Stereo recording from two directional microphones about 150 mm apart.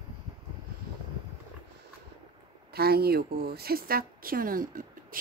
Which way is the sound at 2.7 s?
90° right.